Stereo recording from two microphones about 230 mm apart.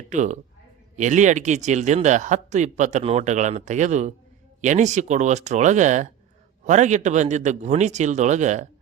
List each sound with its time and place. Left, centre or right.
0.1 s a man's voice: right